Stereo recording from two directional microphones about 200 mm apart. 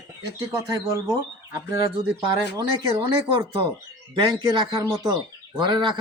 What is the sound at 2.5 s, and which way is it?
Speech, 20° right (ahead or behind).